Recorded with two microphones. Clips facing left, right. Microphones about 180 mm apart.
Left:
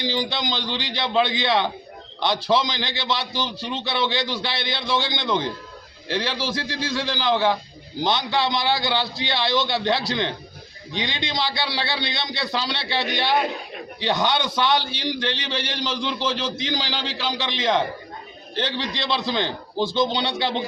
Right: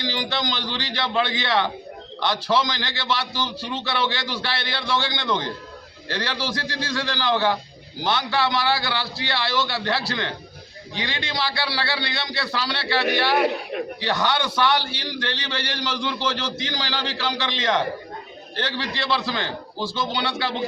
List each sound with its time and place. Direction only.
0.0 s a man's voice: 15° left (ahead or behind)